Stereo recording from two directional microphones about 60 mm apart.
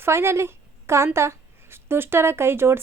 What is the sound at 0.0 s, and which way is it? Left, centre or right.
A woman's voice, right.